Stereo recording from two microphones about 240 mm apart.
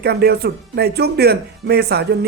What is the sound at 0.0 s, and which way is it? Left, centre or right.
Speech, right.